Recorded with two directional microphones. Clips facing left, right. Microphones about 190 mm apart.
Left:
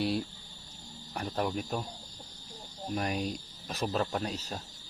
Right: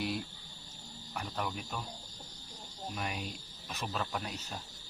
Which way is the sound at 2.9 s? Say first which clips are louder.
Left 8 dB; 40° left (ahead or behind).